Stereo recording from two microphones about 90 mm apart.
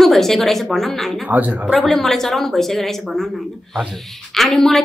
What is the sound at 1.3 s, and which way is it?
Speech, 20° right (ahead or behind).